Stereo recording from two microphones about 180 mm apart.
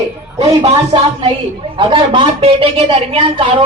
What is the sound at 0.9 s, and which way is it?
Speech, 25° right (ahead or behind).